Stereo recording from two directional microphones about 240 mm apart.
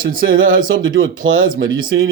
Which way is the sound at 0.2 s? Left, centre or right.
Right.